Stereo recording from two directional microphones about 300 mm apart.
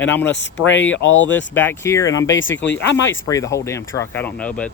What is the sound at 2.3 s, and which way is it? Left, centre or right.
Speech, left.